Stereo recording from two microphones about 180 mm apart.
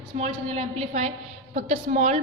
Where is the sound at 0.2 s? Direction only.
35° right (ahead or behind).